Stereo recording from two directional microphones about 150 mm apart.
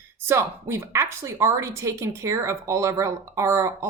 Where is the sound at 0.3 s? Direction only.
20° right (ahead or behind).